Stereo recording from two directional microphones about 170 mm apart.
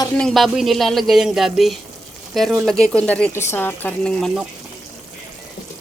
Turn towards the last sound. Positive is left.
turn(degrees=0)  # may be behind; listen again after turning